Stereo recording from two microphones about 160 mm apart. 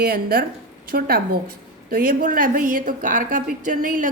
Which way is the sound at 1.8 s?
60° right (ahead or behind).